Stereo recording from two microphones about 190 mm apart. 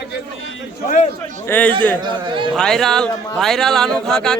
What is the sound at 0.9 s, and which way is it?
Speech, 40° left (ahead or behind).